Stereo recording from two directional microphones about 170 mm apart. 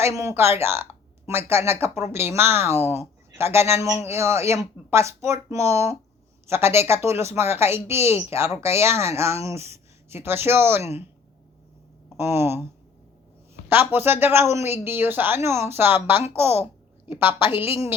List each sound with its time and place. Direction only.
0.0 s speech: 15° right (ahead or behind)
2.6 s speech: 40° left (ahead or behind)
3.3 s speech: 15° right (ahead or behind)
12.1 s speech: 15° right (ahead or behind)
13.7 s speech: 10° right (ahead or behind)